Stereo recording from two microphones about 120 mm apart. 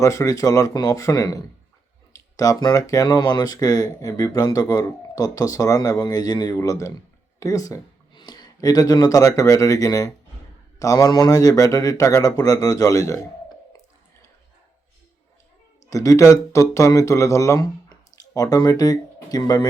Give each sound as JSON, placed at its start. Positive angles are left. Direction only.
{"t": 0.0, "sound": "speech", "side_deg": 25}
{"t": 15.9, "sound": "speech", "side_deg": 25}